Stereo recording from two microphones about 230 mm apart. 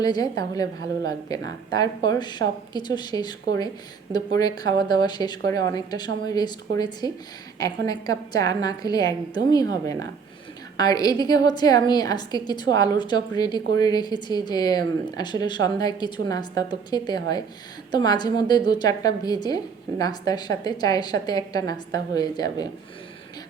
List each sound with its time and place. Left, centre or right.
0.0 s a woman's voice: centre